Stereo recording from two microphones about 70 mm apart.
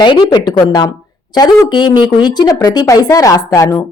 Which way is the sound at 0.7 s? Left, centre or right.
Left.